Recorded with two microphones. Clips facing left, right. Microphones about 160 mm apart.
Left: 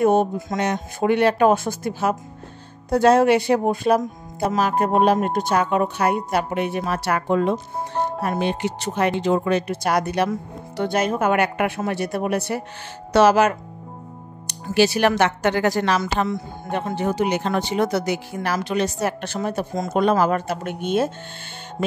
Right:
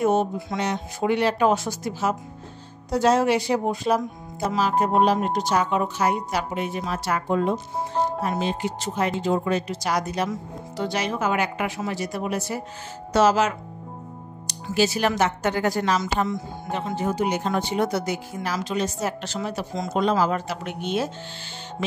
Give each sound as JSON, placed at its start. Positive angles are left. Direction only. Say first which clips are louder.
{"t": 0.0, "sound": "speech", "louder": "left 4 dB", "side_deg": 55}